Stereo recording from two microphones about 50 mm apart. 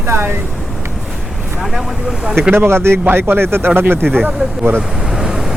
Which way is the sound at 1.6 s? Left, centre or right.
Centre.